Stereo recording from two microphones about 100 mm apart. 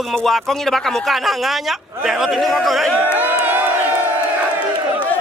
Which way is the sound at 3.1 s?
20° right (ahead or behind).